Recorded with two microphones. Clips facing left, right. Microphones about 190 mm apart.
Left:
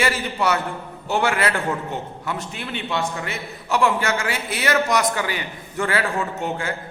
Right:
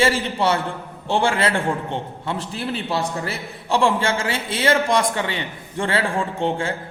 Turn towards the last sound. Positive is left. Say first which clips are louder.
# right 3 dB
turn(degrees=-30)  # may be behind; listen again after turning